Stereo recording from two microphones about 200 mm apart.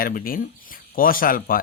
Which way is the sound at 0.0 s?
45° left (ahead or behind).